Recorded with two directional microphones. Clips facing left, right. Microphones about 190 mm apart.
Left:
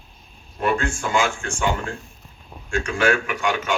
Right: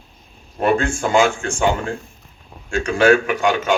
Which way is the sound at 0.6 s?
30° right (ahead or behind).